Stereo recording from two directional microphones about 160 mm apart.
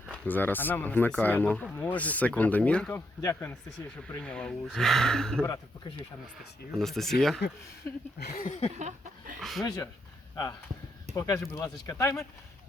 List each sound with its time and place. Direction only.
0.1 s speech: 10° left (ahead or behind)
3.2 s speech: 15° left (ahead or behind)
4.1 s speech: 5° left (ahead or behind)
6.7 s speech: centre (ahead or behind)
8.2 s a sound: 80° left
8.8 s a sound: 50° right (ahead or behind)
9.4 s speech: centre (ahead or behind)
11.1 s speech: 20° left (ahead or behind)